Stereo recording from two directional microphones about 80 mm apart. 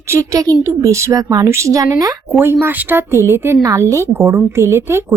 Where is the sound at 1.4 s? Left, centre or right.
Right.